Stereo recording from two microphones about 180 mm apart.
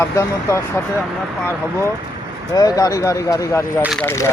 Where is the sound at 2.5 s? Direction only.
20° left (ahead or behind).